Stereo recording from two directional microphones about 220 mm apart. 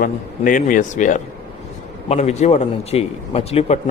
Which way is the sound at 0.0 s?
40° left (ahead or behind).